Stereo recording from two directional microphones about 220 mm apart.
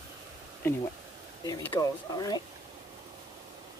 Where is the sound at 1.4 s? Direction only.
15° left (ahead or behind).